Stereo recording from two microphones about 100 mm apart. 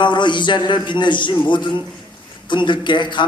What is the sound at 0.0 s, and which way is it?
A man's voice, 50° left (ahead or behind).